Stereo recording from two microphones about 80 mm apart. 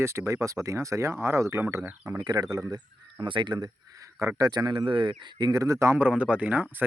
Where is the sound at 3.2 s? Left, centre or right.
Right.